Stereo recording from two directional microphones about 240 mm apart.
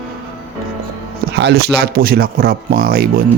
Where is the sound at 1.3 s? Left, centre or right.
Right.